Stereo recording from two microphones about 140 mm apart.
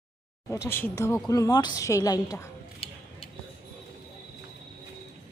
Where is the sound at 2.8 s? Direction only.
45° left (ahead or behind).